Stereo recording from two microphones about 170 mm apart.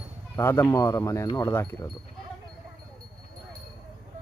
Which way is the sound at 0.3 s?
15° left (ahead or behind).